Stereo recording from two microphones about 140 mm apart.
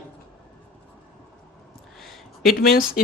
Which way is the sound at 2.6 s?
90° left.